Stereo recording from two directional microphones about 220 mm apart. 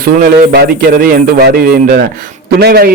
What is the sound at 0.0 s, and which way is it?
A man's voice, 45° right (ahead or behind).